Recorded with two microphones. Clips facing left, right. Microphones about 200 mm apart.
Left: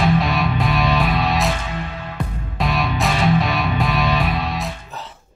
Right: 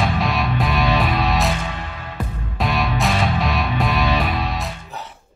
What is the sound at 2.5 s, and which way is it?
Music, centre (ahead or behind).